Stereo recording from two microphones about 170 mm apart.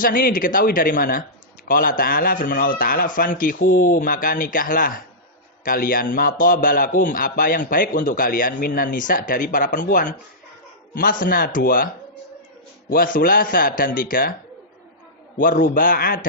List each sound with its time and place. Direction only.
0.0 s a man's voice: 55° left (ahead or behind)
12.9 s speech: 55° left (ahead or behind)
15.4 s speech: 55° left (ahead or behind)